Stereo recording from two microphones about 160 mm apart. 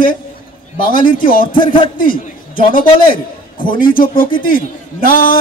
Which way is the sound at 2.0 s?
60° left (ahead or behind).